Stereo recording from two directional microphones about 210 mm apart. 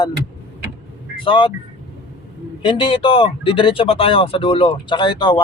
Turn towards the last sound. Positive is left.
turn(degrees=20)  # may be behind; listen again after turning